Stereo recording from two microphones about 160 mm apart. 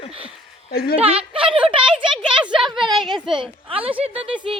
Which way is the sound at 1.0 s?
35° right (ahead or behind).